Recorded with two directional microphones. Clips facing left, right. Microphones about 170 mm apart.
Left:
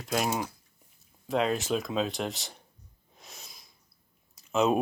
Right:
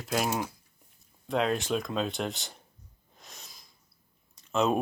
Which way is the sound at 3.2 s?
Centre (ahead or behind).